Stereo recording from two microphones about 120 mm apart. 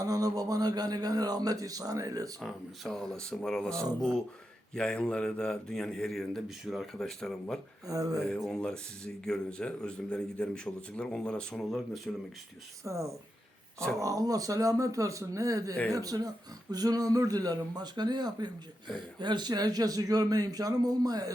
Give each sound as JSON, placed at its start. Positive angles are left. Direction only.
{"t": 0.0, "sound": "speech", "side_deg": -30}
{"t": 2.4, "sound": "speech", "side_deg": 0}
{"t": 7.9, "sound": "speech", "side_deg": -30}
{"t": 8.2, "sound": "speech", "side_deg": 5}
{"t": 12.8, "sound": "speech", "side_deg": -25}